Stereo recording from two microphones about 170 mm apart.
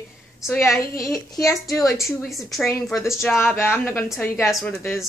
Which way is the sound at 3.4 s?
15° left (ahead or behind).